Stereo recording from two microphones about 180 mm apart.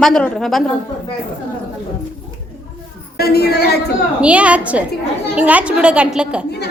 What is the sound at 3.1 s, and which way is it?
Speech, 60° left (ahead or behind).